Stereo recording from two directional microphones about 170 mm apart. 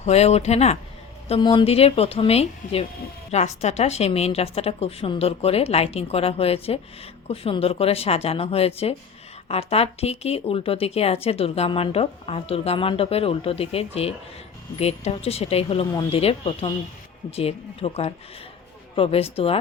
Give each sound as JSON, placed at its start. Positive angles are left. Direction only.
{"t": 0.0, "sound": "a woman's voice", "side_deg": 40}
{"t": 1.3, "sound": "a woman's voice", "side_deg": 30}